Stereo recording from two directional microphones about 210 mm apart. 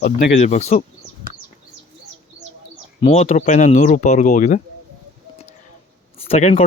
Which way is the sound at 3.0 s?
30° left (ahead or behind).